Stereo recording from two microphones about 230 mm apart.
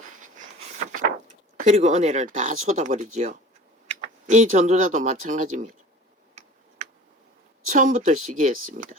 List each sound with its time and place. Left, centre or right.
0.9 s speech: right
7.7 s speech: right